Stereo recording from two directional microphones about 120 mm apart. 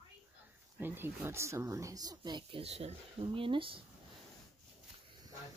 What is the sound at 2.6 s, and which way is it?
Speech, 60° right (ahead or behind).